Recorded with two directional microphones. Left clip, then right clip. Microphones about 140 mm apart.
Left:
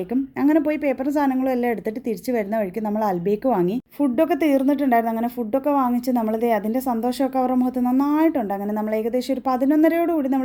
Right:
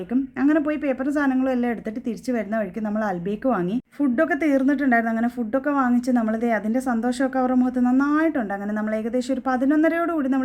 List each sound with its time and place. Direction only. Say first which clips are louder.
0.1 s a woman's voice: left 1 dB; 20° left (ahead or behind)